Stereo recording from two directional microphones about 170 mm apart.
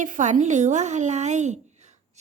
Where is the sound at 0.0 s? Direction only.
45° right (ahead or behind).